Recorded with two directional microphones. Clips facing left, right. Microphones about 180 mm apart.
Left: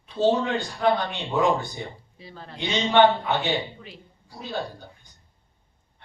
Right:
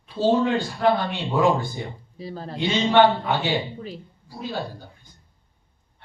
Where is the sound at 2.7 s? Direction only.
10° right (ahead or behind).